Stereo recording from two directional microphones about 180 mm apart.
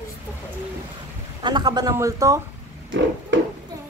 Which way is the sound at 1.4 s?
25° right (ahead or behind).